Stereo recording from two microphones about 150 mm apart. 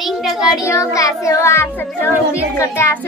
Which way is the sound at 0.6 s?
20° left (ahead or behind).